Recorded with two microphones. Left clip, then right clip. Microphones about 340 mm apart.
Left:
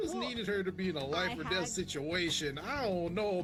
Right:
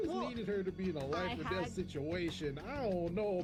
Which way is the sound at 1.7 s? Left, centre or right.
Left.